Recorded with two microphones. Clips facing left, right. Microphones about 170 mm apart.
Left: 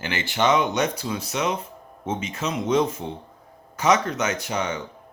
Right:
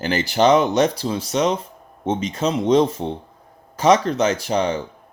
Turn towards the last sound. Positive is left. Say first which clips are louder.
# right 6 dB
turn(degrees=-30)  # may be behind; listen again after turning